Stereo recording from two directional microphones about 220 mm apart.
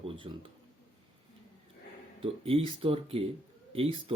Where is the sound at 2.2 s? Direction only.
25° right (ahead or behind).